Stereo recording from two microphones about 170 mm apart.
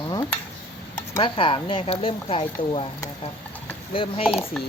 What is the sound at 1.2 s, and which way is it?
Speech, 30° left (ahead or behind).